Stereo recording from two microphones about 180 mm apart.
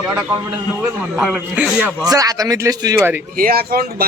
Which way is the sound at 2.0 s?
20° right (ahead or behind).